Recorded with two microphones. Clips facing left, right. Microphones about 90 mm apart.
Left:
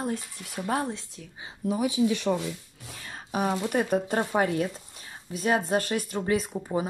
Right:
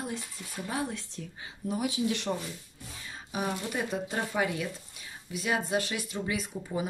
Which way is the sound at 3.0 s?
55° left (ahead or behind).